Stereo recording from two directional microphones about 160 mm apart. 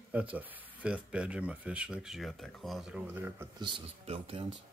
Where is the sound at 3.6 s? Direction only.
35° right (ahead or behind).